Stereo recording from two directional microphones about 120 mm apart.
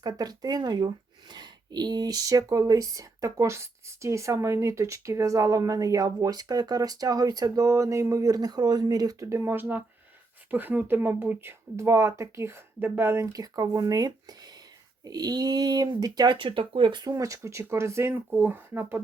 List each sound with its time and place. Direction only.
0.0 s speech: 35° right (ahead or behind)
17.1 s speech: 25° right (ahead or behind)